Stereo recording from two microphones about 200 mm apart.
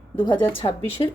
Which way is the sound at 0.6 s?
20° left (ahead or behind).